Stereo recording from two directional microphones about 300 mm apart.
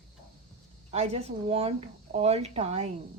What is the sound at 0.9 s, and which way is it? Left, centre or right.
Speech, right.